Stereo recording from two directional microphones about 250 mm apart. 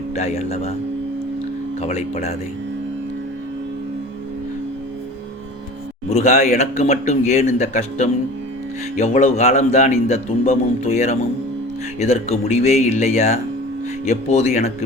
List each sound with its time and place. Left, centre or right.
0.2 s a man's voice: left
1.8 s a man's voice: left
6.1 s a man's voice: left